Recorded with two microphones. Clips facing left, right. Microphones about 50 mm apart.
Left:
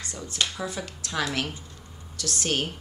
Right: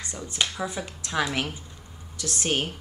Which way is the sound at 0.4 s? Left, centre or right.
Centre.